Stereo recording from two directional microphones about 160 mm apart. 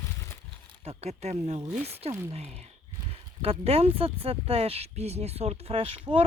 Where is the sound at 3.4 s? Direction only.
40° right (ahead or behind).